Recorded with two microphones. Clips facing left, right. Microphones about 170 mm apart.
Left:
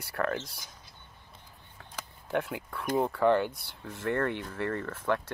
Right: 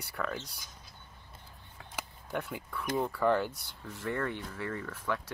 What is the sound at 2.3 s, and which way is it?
Speech, 60° left (ahead or behind).